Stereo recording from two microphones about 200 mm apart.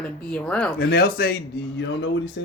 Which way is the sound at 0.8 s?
50° left (ahead or behind).